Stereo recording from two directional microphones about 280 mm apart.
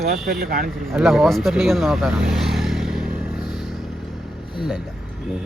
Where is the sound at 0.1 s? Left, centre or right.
Right.